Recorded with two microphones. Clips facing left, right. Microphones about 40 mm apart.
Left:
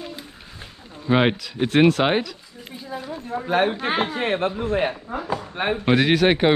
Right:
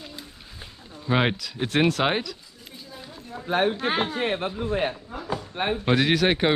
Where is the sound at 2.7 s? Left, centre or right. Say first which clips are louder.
Left 10 dB; left.